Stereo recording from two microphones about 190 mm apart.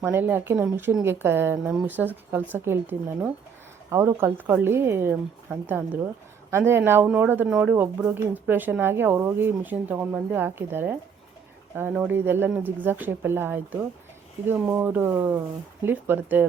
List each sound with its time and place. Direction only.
0.0 s speech: 10° right (ahead or behind)